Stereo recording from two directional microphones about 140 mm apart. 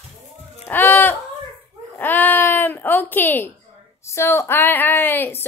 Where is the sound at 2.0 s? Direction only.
10° left (ahead or behind).